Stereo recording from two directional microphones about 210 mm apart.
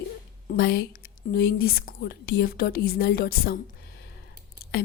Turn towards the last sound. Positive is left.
turn(degrees=50)  # may be behind; listen again after turning